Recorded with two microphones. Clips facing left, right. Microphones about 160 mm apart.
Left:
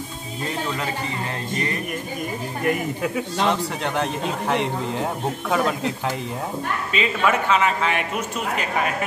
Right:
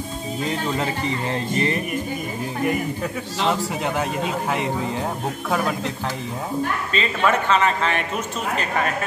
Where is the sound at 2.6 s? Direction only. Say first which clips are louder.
Left 1 dB; 5° right (ahead or behind).